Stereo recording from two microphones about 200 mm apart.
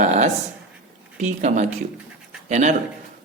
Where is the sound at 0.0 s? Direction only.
35° right (ahead or behind).